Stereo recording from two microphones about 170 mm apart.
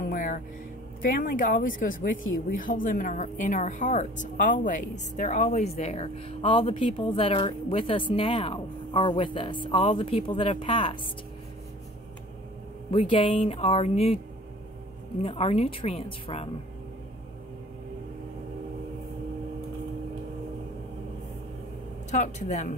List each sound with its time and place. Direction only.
0.1 s music: 50° left (ahead or behind)
1.0 s speech: 50° left (ahead or behind); by 11.0 s 30° left (ahead or behind)
12.9 s speech: 30° left (ahead or behind)
15.2 s speech: 35° left (ahead or behind)
22.1 s speech: 45° left (ahead or behind)